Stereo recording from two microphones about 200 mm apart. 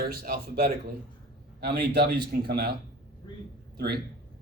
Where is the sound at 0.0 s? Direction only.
50° right (ahead or behind).